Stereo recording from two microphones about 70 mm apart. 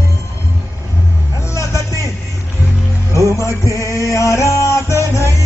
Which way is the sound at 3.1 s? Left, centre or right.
Left.